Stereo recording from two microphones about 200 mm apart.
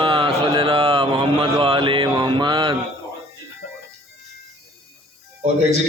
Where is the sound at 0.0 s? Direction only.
25° right (ahead or behind).